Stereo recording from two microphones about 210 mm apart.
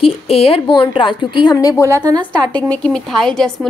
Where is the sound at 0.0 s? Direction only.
25° left (ahead or behind).